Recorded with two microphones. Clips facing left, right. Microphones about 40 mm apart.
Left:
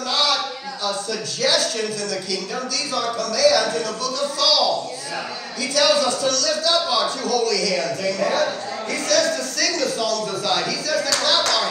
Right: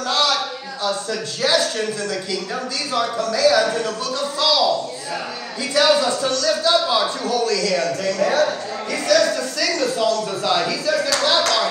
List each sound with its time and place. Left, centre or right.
0.1 s a sound: right
1.4 s speech: right
5.8 s a man's voice: right